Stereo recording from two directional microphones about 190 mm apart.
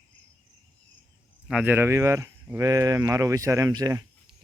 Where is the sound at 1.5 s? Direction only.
5° right (ahead or behind).